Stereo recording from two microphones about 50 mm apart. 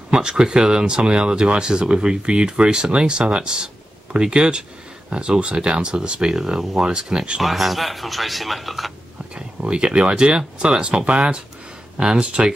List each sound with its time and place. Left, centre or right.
0.1 s speech: centre
7.4 s speech: centre
9.3 s speech: right